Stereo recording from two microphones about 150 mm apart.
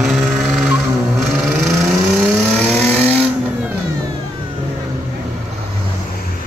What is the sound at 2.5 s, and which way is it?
Vehicle, 10° left (ahead or behind).